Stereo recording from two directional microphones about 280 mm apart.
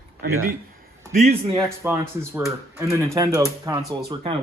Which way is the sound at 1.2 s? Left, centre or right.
Right.